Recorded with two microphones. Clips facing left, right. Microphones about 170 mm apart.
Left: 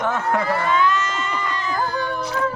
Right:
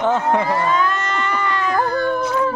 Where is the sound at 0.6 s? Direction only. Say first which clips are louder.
Even; 45° right (ahead or behind).